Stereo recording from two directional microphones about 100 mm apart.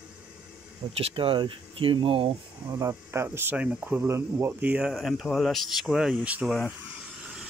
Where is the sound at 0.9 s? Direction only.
70° right (ahead or behind).